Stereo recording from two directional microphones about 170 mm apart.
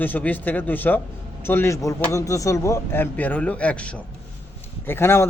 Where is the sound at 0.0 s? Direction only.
10° left (ahead or behind).